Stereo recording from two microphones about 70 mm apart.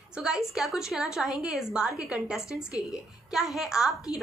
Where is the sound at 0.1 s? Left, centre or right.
Centre.